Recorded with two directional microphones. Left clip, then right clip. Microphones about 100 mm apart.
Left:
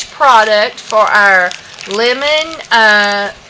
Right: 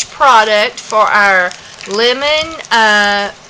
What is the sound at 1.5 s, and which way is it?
Speech, centre (ahead or behind).